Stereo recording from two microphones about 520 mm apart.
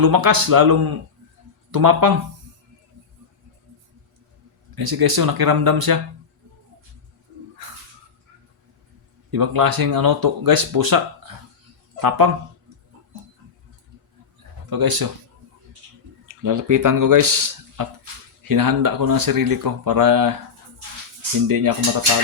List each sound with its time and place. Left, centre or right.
0.0 s speech: right
4.7 s speech: right
9.3 s speech: right
14.7 s speech: right
16.3 s speech: right
21.4 s speech: right